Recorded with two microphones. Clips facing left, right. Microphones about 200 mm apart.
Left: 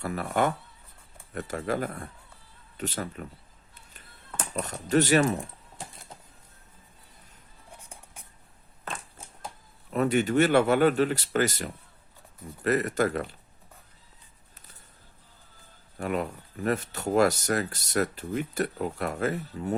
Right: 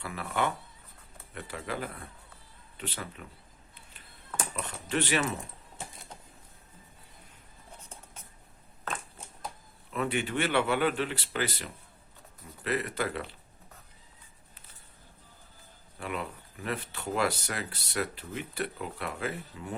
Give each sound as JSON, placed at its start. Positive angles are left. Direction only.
{"t": 0.0, "sound": "speech", "side_deg": 45}
{"t": 4.5, "sound": "speech", "side_deg": 40}
{"t": 7.8, "sound": "music", "side_deg": 15}
{"t": 9.9, "sound": "speech", "side_deg": 40}
{"t": 16.0, "sound": "speech", "side_deg": 45}